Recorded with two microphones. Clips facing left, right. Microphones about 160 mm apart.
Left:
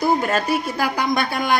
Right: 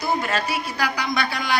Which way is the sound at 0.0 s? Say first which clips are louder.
Left 5 dB; 45° left (ahead or behind).